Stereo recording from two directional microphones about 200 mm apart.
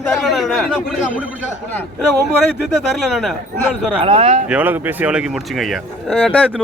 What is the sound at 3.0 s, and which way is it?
Speech, centre (ahead or behind).